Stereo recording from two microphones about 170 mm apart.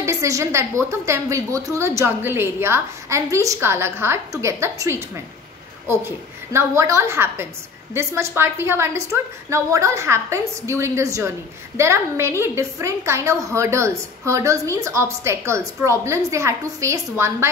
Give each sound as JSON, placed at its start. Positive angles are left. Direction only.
{"t": 0.0, "sound": "a woman's voice", "side_deg": -15}